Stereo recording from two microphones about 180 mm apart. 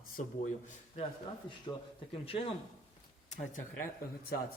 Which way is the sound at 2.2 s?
30° left (ahead or behind).